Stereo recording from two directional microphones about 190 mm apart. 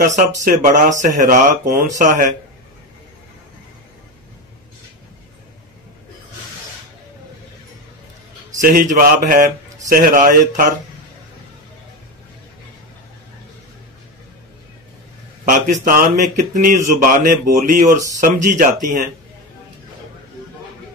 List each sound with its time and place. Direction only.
0.5 s a man's voice: 40° right (ahead or behind)
8.5 s a man's voice: 45° right (ahead or behind)
15.4 s a man's voice: 45° right (ahead or behind)